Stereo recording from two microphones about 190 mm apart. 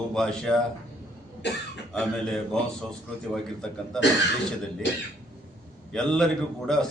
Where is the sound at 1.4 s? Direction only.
65° left (ahead or behind).